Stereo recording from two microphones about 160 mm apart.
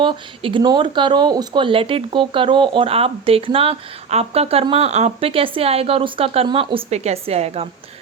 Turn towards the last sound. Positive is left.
turn(degrees=-40)  # may be behind; listen again after turning